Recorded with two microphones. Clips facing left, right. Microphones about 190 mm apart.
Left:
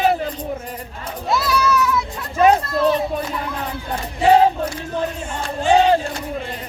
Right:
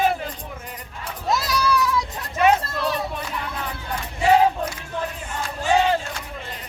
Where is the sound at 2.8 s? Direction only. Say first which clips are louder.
Left 8 dB; 35° left (ahead or behind).